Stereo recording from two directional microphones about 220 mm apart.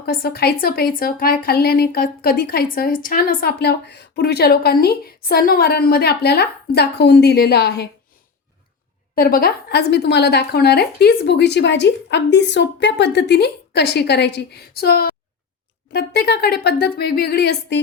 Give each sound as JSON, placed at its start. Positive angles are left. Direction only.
{"t": 0.0, "sound": "a woman's voice", "side_deg": 45}
{"t": 9.1, "sound": "a woman's voice", "side_deg": 40}